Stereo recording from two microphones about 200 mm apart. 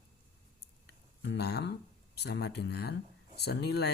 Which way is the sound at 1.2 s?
60° left (ahead or behind).